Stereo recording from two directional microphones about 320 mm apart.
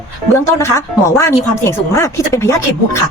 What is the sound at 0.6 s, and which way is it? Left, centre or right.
Speech, centre.